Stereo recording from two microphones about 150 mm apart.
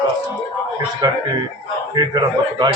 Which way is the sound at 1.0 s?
25° right (ahead or behind).